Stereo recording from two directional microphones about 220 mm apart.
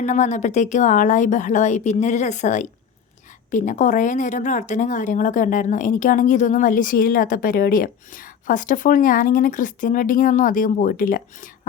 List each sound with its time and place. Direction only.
0.0 s speech: 35° left (ahead or behind)